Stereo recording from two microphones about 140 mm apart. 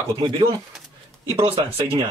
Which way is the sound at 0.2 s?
35° right (ahead or behind).